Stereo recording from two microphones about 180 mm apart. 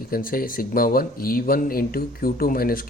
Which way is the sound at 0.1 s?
55° left (ahead or behind).